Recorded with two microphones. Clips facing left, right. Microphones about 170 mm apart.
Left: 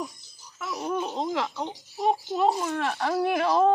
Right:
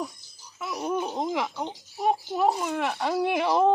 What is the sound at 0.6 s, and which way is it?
Speech, 15° right (ahead or behind).